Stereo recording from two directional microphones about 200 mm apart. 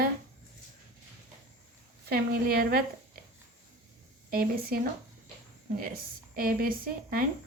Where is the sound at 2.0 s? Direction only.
50° right (ahead or behind).